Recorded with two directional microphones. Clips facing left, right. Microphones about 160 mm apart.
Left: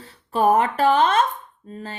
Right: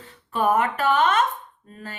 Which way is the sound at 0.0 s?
30° left (ahead or behind).